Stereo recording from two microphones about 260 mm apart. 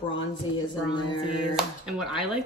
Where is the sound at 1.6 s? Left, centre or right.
Centre.